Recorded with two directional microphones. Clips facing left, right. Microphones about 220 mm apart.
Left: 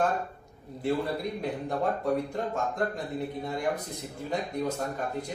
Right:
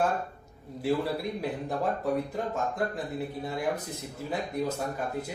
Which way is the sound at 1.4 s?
Centre (ahead or behind).